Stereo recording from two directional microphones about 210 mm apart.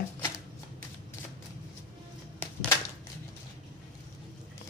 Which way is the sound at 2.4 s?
5° left (ahead or behind).